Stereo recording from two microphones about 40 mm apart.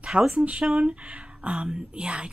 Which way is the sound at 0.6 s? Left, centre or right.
Centre.